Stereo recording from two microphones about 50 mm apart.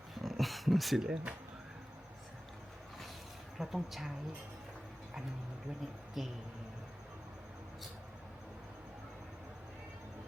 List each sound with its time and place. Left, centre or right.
0.1 s a sound: centre
1.0 s speech: centre
3.6 s a woman's voice: centre
6.2 s a woman's voice: centre